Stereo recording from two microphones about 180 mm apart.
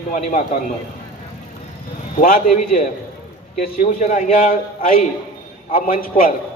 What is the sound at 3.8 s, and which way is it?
A man's voice, 45° left (ahead or behind).